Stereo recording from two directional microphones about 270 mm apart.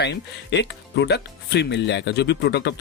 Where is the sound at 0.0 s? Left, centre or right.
Left.